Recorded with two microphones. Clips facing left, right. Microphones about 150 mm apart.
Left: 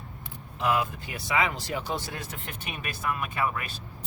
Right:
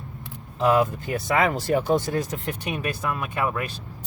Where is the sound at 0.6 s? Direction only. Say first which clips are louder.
Right 7 dB; 35° right (ahead or behind).